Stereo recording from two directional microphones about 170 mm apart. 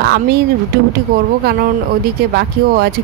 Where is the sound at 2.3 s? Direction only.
65° right (ahead or behind).